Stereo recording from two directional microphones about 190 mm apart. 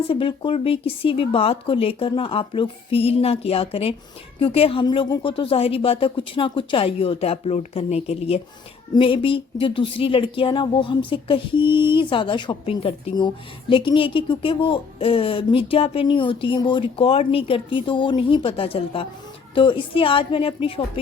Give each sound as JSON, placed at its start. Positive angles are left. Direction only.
{"t": 0.1, "sound": "speech", "side_deg": 30}